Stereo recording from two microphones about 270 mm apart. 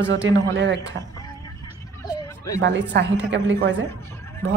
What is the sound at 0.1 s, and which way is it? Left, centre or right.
Speech, right.